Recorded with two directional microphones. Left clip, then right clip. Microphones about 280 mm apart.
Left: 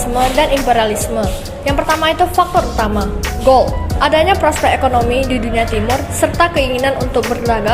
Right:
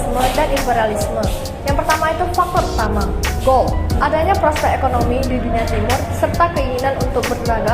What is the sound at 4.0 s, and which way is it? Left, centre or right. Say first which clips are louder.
Speech: left 4 dB; left.